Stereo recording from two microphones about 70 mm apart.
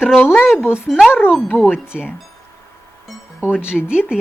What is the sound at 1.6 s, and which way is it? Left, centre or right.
Music, centre.